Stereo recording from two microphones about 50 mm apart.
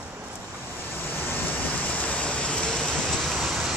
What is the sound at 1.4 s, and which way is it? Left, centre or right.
Vehicle, left.